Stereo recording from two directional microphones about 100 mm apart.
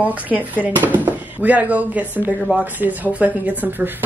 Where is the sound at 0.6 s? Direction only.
15° right (ahead or behind).